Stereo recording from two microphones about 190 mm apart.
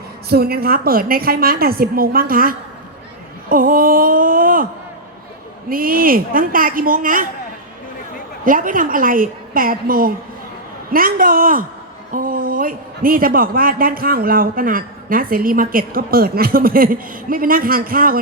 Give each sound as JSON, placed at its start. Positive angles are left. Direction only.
{"t": 0.3, "sound": "a man's voice", "side_deg": -55}
{"t": 8.4, "sound": "a man's voice", "side_deg": -45}